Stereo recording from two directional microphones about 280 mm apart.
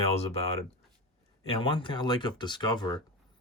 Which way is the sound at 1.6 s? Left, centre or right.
Centre.